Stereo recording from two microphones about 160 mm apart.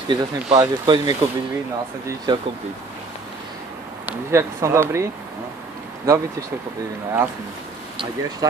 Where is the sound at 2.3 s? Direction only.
25° right (ahead or behind).